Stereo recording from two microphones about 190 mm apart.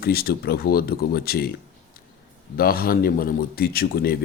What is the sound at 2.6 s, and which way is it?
Speech, 50° left (ahead or behind).